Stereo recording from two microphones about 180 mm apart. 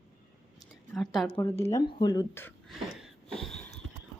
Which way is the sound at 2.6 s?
Centre (ahead or behind).